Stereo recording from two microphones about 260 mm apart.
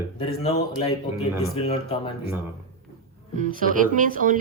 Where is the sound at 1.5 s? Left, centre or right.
Left.